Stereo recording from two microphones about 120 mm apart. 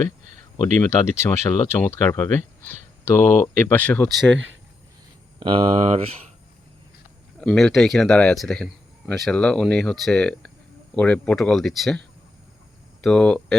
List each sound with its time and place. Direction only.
0.6 s speech: 20° left (ahead or behind)
5.4 s speech: 45° right (ahead or behind)
7.3 s speech: 5° left (ahead or behind)
13.0 s speech: 5° left (ahead or behind)